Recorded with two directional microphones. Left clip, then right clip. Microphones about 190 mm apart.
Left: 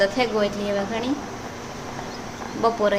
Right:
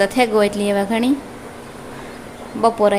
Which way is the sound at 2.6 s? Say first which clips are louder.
Right 5 dB; 30° right (ahead or behind).